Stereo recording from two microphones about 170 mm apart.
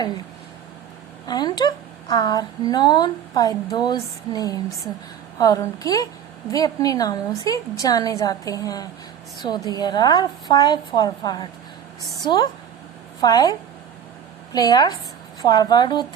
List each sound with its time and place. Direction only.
1.3 s a woman's voice: 25° left (ahead or behind)